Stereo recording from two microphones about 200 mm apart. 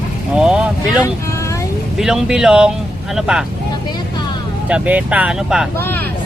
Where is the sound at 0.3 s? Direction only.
5° right (ahead or behind).